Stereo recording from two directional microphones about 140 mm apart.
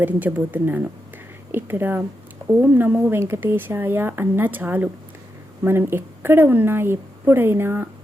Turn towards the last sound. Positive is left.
turn(degrees=-15)  # may be behind; listen again after turning